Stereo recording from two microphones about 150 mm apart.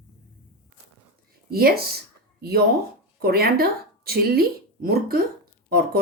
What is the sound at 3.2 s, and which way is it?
Speech, 90° right.